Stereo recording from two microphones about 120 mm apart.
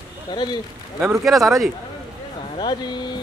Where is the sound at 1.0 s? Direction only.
Centre (ahead or behind).